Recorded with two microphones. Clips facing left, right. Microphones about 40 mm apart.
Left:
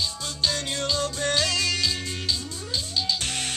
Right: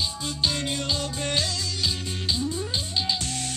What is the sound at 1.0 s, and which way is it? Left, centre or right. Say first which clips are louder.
Music: left 3 dB; left.